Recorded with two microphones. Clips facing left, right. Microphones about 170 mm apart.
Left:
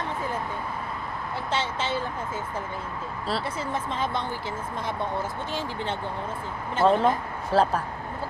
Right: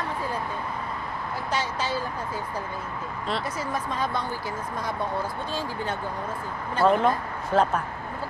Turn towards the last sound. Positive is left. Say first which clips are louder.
# even
turn(degrees=30)  # may be behind; listen again after turning